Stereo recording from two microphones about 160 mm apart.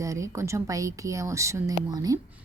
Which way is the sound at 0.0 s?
20° right (ahead or behind).